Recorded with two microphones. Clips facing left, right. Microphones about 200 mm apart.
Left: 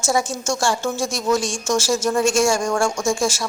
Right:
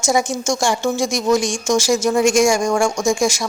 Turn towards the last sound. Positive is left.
turn(degrees=-15)  # may be behind; listen again after turning